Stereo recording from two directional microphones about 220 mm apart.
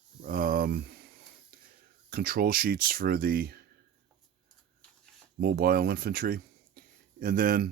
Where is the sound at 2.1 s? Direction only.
40° right (ahead or behind).